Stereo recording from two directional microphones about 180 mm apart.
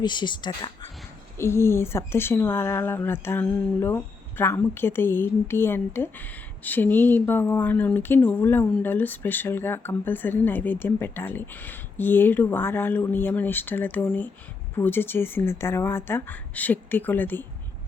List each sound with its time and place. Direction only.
0.0 s speech: 25° left (ahead or behind)
1.4 s speech: 15° left (ahead or behind)